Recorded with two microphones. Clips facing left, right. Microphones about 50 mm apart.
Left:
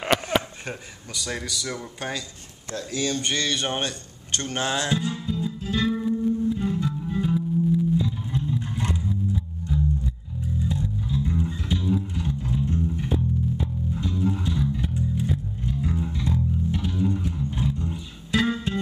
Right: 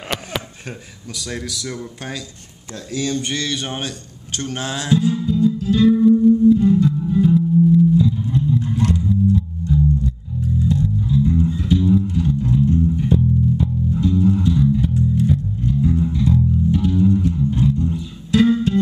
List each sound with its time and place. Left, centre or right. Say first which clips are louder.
0.0 s a sound: left 4 dB; left
0.7 s speech: right 2 dB; centre
5.7 s music: right 11 dB; centre